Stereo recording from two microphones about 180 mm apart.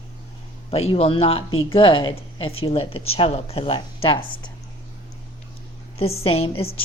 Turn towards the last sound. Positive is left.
turn(degrees=30)  # may be behind; listen again after turning